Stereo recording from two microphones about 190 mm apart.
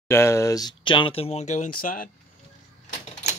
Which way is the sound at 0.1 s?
15° left (ahead or behind).